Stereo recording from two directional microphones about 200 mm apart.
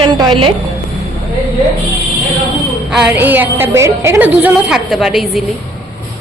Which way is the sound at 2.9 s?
5° right (ahead or behind).